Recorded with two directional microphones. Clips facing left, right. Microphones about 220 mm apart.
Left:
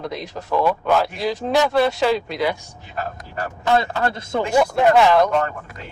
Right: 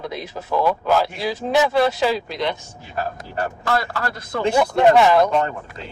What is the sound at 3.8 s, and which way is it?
Speech, 20° left (ahead or behind).